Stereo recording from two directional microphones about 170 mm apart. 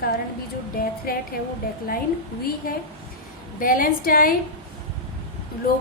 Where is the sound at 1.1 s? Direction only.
60° left (ahead or behind).